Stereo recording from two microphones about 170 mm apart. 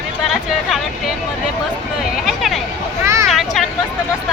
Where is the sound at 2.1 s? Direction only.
Centre (ahead or behind).